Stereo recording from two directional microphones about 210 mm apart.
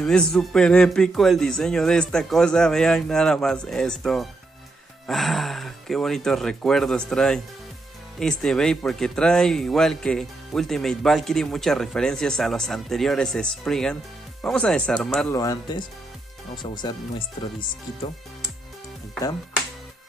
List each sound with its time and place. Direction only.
0.0 s speech: 5° left (ahead or behind)
15.3 s speech: 15° left (ahead or behind)